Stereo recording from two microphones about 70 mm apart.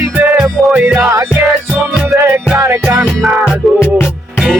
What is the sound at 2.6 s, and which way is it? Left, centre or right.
Music, right.